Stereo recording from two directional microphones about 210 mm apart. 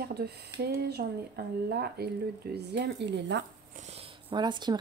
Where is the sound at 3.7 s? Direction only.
30° right (ahead or behind).